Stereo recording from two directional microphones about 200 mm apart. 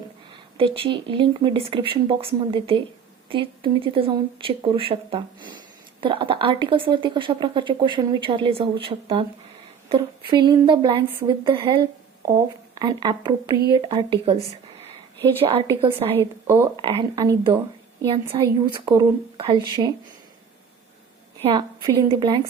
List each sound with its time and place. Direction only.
0.5 s speech: 30° right (ahead or behind)
15.4 s speech: 25° right (ahead or behind)
21.4 s speech: 25° right (ahead or behind)